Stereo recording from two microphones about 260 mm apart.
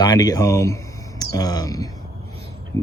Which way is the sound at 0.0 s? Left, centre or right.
Centre.